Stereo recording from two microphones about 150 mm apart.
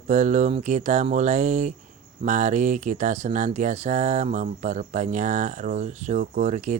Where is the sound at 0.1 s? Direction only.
55° right (ahead or behind).